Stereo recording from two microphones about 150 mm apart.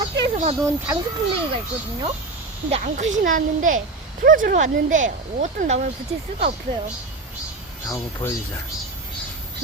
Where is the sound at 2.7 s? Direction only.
50° right (ahead or behind).